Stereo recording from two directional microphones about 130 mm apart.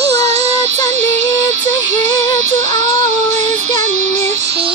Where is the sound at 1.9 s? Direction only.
65° right (ahead or behind).